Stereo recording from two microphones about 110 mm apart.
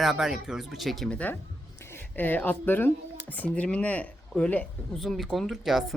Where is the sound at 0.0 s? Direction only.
5° right (ahead or behind).